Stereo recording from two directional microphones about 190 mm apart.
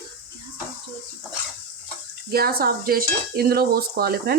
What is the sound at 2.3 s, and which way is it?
Cutlery, 50° right (ahead or behind).